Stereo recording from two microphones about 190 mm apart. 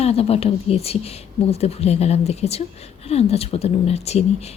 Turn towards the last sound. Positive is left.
turn(degrees=35)  # may be behind; listen again after turning